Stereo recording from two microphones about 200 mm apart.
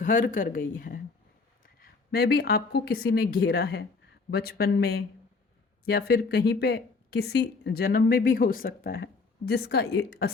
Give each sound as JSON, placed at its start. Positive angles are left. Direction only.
{"t": 0.0, "sound": "speech", "side_deg": 40}